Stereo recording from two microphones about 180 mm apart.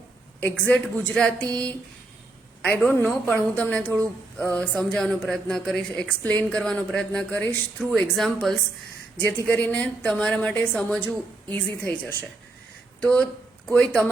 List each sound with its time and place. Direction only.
0.3 s a woman's voice: 10° left (ahead or behind)
1.5 s a sound: 20° right (ahead or behind)
2.8 s a woman's voice: 10° left (ahead or behind)
9.6 s a woman's voice: 10° left (ahead or behind)